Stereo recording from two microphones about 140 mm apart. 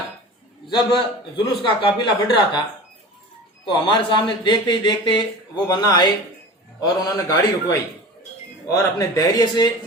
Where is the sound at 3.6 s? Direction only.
35° left (ahead or behind).